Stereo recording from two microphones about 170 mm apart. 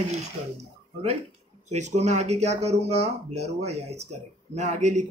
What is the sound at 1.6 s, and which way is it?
Speech, 40° right (ahead or behind).